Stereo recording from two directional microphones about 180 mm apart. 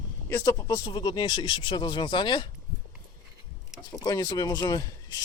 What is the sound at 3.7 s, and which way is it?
Speech, 20° left (ahead or behind).